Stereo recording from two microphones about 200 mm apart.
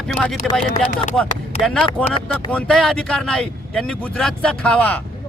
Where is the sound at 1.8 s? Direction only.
25° left (ahead or behind).